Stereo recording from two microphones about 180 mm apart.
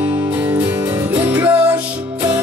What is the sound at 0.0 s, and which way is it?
Music, 10° right (ahead or behind).